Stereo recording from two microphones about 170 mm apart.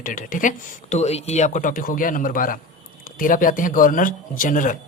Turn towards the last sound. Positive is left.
turn(degrees=50)  # may be behind; listen again after turning